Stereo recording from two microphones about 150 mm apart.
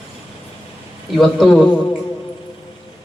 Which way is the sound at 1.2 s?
Centre (ahead or behind).